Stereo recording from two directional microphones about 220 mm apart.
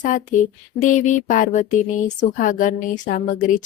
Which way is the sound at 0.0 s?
35° left (ahead or behind).